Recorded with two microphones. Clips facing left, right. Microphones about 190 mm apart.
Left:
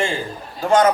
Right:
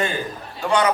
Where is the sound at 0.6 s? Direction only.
45° left (ahead or behind).